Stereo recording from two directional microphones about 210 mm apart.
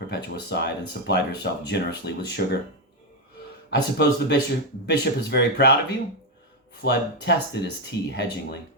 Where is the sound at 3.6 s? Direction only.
55° left (ahead or behind).